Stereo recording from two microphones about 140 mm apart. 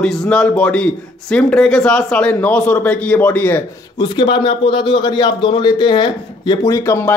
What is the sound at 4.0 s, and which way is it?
A man's voice, 35° left (ahead or behind).